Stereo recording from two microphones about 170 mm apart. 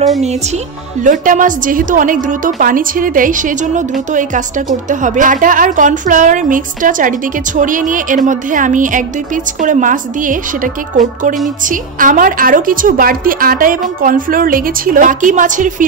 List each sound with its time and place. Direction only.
1.0 s a woman's voice: 50° right (ahead or behind)